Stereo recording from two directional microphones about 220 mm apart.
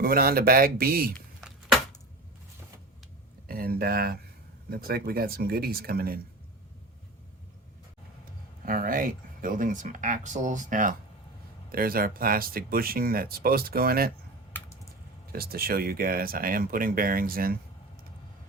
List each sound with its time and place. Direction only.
0.0 s speech: 40° right (ahead or behind)
3.4 s speech: 45° right (ahead or behind)
8.2 s speech: 40° right (ahead or behind)
15.3 s speech: 45° right (ahead or behind)